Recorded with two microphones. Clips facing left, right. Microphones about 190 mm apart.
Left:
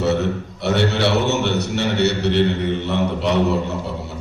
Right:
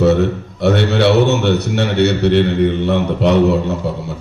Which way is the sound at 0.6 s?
55° right (ahead or behind).